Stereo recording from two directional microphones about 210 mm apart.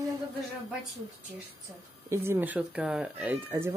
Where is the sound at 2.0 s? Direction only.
10° right (ahead or behind).